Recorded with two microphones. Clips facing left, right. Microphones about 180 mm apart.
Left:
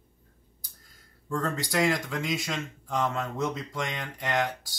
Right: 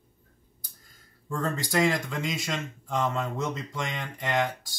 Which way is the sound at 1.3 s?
Centre (ahead or behind).